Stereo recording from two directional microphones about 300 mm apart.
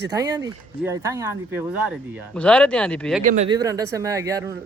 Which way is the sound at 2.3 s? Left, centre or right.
Centre.